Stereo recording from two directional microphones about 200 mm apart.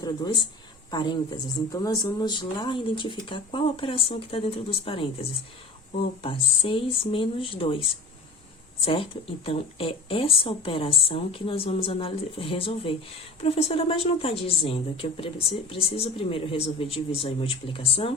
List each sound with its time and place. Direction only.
0.9 s speech: 20° left (ahead or behind)